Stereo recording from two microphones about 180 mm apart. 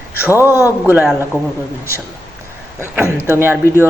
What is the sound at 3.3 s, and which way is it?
Speech, 15° right (ahead or behind).